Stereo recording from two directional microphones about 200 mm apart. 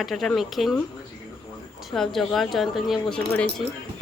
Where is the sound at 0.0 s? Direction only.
Centre (ahead or behind).